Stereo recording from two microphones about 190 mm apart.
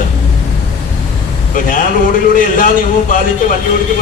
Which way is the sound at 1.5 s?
45° left (ahead or behind).